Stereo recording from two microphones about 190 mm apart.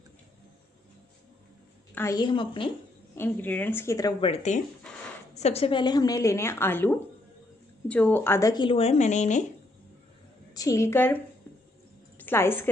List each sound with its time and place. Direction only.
2.0 s speech: 20° left (ahead or behind)
3.2 s a woman's voice: 10° left (ahead or behind)
4.2 s a woman's voice: 35° left (ahead or behind)
10.5 s a woman's voice: 20° left (ahead or behind)